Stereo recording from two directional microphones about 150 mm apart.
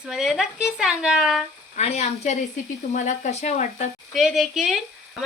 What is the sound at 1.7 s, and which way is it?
Speech, 45° left (ahead or behind).